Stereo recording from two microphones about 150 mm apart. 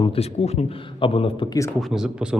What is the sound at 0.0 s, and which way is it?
A man's voice, 45° left (ahead or behind).